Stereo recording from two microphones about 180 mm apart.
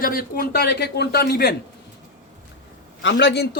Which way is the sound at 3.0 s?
70° left (ahead or behind).